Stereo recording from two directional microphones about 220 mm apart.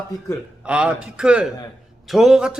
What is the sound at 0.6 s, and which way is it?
A man's voice, 5° right (ahead or behind).